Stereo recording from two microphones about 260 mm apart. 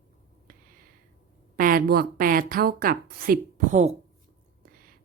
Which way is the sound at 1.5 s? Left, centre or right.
Right.